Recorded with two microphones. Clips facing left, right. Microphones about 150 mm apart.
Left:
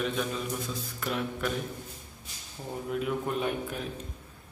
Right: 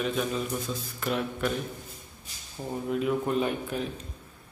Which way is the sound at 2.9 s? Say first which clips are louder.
Right 4 dB; centre (ahead or behind).